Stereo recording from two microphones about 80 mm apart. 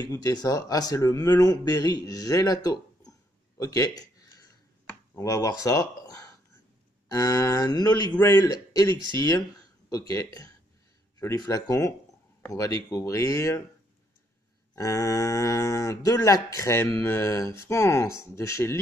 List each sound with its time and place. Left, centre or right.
0.0 s speech: left
3.5 s a sound: left
5.1 s a man's voice: left
14.8 s speech: left